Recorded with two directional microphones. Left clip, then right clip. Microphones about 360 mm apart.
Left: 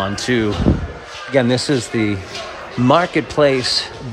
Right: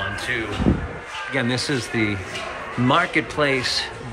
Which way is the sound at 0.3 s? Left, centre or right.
Left.